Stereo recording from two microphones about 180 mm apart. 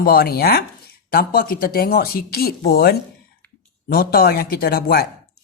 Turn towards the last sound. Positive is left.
turn(degrees=60)  # may be behind; listen again after turning